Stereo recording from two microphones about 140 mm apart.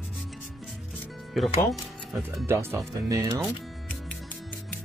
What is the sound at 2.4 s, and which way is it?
Speech, 20° right (ahead or behind).